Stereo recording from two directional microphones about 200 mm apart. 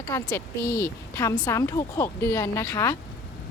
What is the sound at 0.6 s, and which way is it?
Speech, 45° left (ahead or behind).